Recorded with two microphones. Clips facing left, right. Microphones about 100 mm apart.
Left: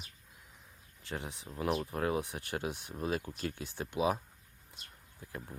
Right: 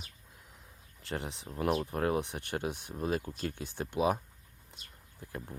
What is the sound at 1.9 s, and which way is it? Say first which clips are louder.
Speech: right 2 dB; 45° right (ahead or behind).